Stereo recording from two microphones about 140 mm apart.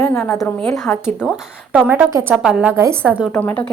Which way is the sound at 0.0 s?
15° left (ahead or behind).